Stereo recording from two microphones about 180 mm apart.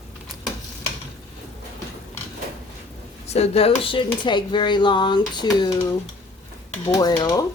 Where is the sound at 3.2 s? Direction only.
35° left (ahead or behind).